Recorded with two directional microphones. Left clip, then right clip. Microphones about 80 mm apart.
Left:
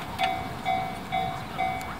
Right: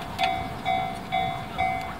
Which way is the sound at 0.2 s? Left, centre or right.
Right.